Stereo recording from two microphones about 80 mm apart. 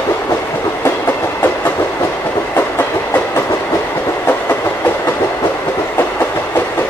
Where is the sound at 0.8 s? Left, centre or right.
Left.